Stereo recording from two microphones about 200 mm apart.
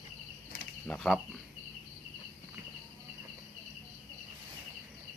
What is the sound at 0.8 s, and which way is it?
Speech, 5° left (ahead or behind).